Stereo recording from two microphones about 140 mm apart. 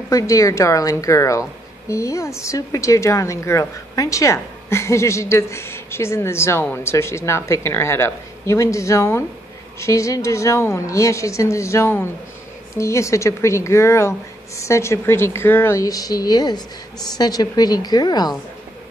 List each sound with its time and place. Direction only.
0.1 s a woman's voice: 20° left (ahead or behind)